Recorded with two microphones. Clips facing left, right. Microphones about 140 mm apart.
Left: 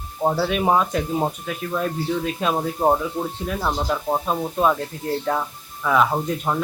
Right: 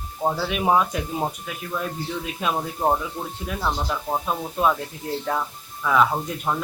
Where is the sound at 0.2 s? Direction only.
10° left (ahead or behind).